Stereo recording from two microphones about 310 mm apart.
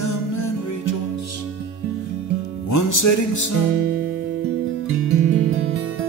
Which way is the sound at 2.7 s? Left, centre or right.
Left.